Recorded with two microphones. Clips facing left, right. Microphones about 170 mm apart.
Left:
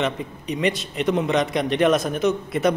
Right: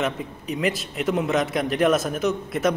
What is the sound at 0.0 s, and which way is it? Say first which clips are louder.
A man's voice: left 1 dB; centre (ahead or behind).